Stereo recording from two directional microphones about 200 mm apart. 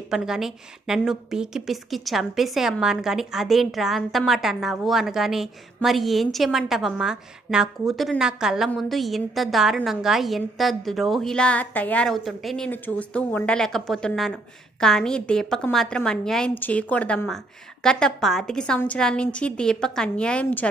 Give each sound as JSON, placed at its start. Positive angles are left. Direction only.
{"t": 0.1, "sound": "a woman's voice", "side_deg": 0}